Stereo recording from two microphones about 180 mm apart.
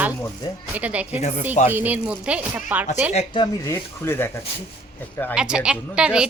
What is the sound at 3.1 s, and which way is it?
Speech, 25° left (ahead or behind).